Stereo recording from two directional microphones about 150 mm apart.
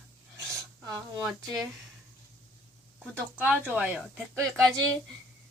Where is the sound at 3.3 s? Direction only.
10° right (ahead or behind).